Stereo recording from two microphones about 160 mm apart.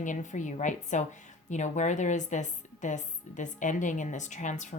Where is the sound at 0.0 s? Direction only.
50° left (ahead or behind).